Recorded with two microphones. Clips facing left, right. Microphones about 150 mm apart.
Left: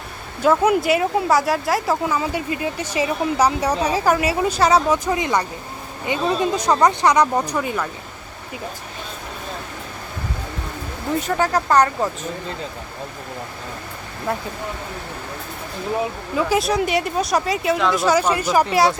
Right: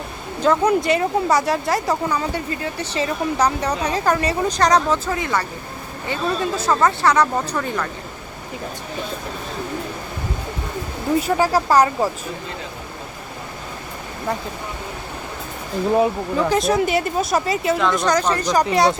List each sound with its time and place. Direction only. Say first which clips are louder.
0.4 s speech: left 1 dB; 5° left (ahead or behind)
5.0 s speech: left 2 dB; 20° left (ahead or behind)
11.2 s speech: right 1 dB; 10° right (ahead or behind)
16.5 s speech: right 1 dB; centre (ahead or behind)